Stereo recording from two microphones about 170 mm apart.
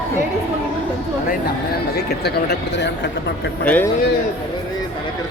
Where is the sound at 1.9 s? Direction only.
75° left (ahead or behind).